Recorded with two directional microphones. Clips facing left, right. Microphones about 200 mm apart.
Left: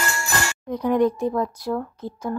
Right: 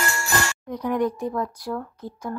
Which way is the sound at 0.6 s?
25° left (ahead or behind).